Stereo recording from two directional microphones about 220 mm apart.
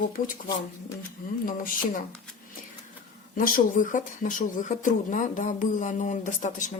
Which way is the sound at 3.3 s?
40° left (ahead or behind).